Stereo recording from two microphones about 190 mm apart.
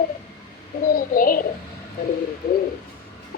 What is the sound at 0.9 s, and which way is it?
Speech, 45° left (ahead or behind).